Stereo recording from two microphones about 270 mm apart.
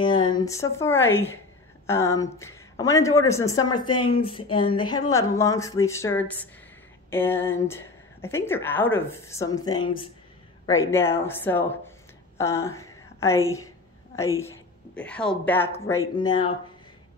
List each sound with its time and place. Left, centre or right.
0.0 s a woman's voice: centre
12.4 s a sound: centre
14.1 s a woman's voice: centre